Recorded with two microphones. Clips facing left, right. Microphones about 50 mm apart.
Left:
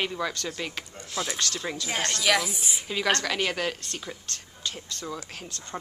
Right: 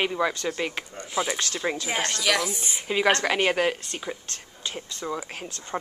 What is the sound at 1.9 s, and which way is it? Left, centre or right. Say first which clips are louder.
Speech: right 2 dB; centre.